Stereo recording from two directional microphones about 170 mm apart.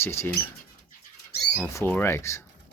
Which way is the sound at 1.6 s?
15° left (ahead or behind).